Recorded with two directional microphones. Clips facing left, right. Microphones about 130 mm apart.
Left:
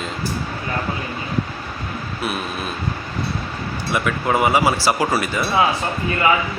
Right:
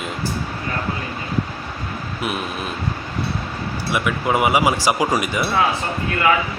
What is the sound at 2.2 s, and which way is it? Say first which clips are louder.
Speech: even; 20° right (ahead or behind).